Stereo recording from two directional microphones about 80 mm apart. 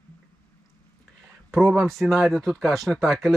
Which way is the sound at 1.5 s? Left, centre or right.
Centre.